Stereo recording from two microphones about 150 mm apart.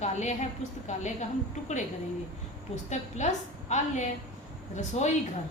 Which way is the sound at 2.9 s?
50° left (ahead or behind).